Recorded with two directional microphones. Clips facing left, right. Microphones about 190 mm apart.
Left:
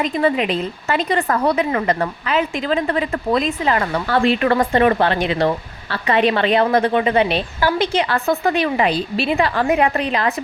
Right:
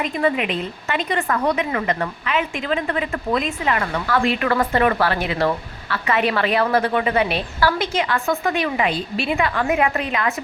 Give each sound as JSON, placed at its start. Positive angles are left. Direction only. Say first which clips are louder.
{"t": 0.0, "sound": "a woman's voice", "louder": "left 3 dB", "side_deg": 30}